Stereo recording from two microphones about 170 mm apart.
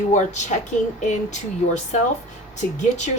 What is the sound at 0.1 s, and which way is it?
Speech, 45° left (ahead or behind).